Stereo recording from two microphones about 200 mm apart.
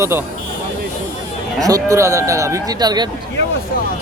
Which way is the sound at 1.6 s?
15° right (ahead or behind).